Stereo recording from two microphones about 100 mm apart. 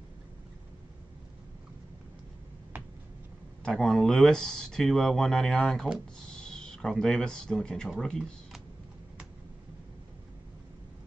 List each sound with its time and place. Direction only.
3.6 s speech: 5° left (ahead or behind)